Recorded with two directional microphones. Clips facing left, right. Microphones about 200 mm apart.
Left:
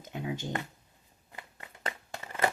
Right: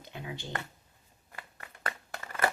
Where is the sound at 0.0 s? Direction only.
45° left (ahead or behind).